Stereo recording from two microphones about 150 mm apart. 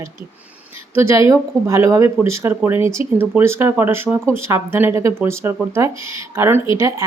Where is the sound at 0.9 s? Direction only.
20° right (ahead or behind).